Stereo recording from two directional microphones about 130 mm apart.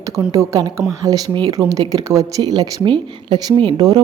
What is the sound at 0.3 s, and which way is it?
Speech, 25° right (ahead or behind).